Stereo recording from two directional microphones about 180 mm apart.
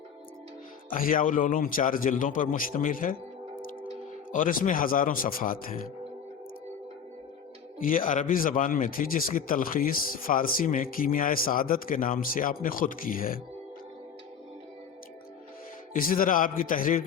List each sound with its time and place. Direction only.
0.9 s a man's voice: 50° left (ahead or behind)
4.3 s a man's voice: 45° left (ahead or behind)
7.8 s a man's voice: 50° left (ahead or behind)
15.9 s a man's voice: 50° left (ahead or behind)